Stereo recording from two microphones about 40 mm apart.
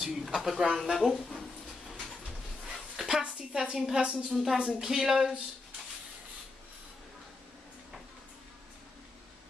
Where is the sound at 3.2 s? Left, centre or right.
Centre.